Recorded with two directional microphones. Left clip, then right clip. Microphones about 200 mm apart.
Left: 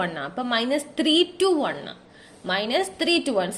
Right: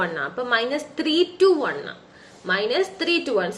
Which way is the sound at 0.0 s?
45° left (ahead or behind).